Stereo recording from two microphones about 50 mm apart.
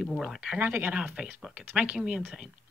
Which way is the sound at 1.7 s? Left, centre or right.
Right.